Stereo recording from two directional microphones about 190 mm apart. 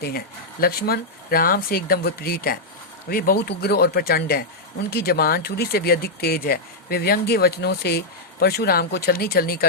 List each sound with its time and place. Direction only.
0.6 s speech: 55° left (ahead or behind)